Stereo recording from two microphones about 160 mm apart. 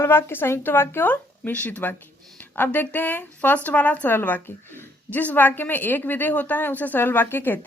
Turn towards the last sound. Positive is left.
turn(degrees=10)  # may be behind; listen again after turning